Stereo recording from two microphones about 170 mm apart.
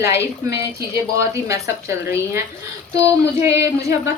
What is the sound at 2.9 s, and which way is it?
Child singing, 20° right (ahead or behind).